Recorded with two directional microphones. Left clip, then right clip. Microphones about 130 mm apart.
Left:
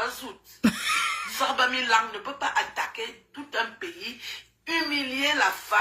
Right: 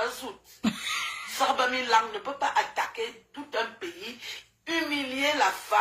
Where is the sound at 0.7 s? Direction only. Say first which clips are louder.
Left 7 dB; 60° left (ahead or behind).